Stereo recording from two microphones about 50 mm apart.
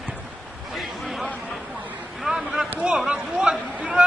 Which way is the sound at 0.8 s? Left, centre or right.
Centre.